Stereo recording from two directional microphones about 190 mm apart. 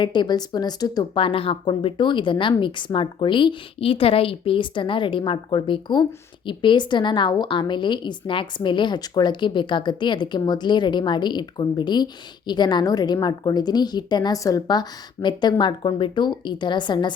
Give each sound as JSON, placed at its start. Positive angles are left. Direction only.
{"t": 0.0, "sound": "speech", "side_deg": 25}